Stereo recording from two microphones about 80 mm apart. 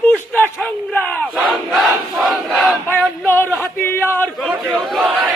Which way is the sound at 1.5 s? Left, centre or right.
Centre.